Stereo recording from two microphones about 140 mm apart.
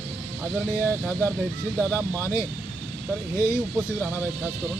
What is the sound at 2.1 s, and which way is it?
Speech, 15° left (ahead or behind).